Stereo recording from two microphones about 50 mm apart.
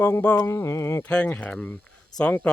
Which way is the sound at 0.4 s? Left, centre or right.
Left.